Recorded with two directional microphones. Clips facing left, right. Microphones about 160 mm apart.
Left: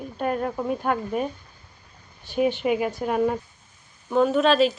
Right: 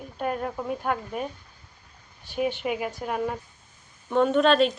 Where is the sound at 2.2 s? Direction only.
10° right (ahead or behind).